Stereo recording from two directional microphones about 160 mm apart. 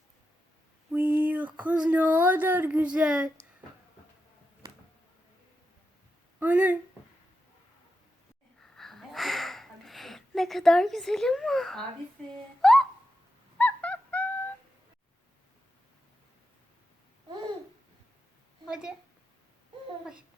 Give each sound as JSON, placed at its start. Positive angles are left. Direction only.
{"t": 0.9, "sound": "speech", "side_deg": -10}
{"t": 6.4, "sound": "speech", "side_deg": -10}
{"t": 8.6, "sound": "a sound", "side_deg": 0}
{"t": 13.6, "sound": "fowl", "side_deg": 10}
{"t": 18.7, "sound": "a woman's voice", "side_deg": -5}